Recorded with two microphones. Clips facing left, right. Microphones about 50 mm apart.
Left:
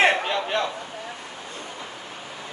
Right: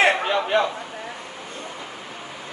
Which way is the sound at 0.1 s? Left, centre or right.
Right.